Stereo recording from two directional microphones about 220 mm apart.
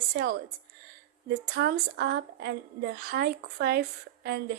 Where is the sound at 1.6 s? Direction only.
45° right (ahead or behind).